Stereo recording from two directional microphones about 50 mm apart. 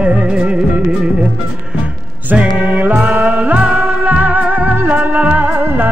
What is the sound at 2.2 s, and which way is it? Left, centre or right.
Music, right.